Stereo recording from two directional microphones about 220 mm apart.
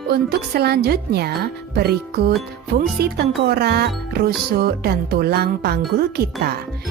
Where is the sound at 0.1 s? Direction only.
45° right (ahead or behind).